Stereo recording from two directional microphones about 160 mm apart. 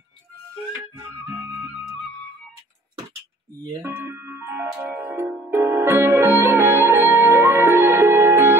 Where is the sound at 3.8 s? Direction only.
15° right (ahead or behind).